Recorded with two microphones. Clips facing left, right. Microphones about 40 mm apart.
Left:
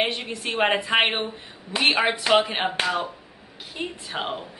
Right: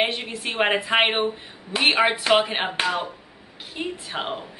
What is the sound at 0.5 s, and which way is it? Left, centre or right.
Speech, right.